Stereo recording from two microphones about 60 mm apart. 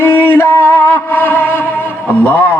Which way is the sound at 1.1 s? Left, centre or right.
Left.